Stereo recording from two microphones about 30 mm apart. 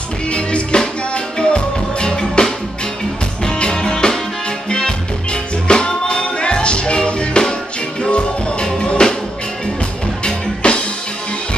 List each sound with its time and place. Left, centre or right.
0.3 s music: left
10.2 s music: left